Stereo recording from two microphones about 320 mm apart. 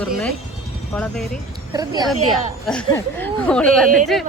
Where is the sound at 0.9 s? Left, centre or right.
Centre.